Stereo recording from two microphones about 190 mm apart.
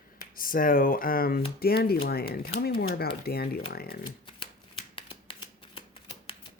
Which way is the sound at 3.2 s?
55° left (ahead or behind).